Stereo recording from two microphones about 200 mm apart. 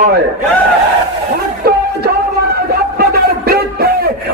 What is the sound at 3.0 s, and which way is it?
Music, 50° right (ahead or behind).